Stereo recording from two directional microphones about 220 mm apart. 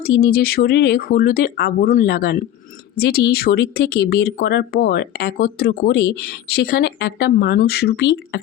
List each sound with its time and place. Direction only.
0.0 s speech: 45° left (ahead or behind)